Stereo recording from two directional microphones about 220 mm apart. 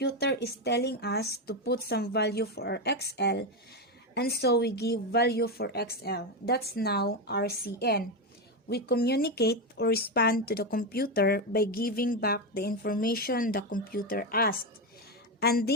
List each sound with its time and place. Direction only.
0.0 s speech: 50° left (ahead or behind)